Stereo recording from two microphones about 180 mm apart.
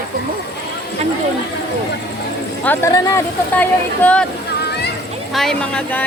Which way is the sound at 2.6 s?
10° left (ahead or behind).